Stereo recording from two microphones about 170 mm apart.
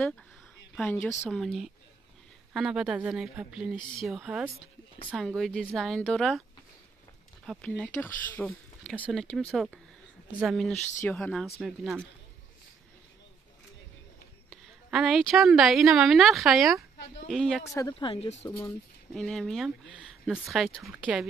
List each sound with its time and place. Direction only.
1.3 s speech: centre (ahead or behind)
7.4 s speech: 10° left (ahead or behind)
14.5 s a woman's voice: centre (ahead or behind)
17.6 s speech: 20° left (ahead or behind)
17.9 s speech: 30° left (ahead or behind)
19.1 s speech: 5° left (ahead or behind)